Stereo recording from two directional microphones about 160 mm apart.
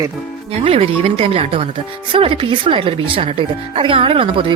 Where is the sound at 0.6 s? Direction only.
35° right (ahead or behind).